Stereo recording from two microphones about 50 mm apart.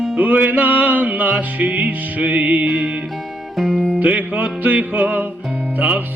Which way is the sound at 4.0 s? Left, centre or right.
Right.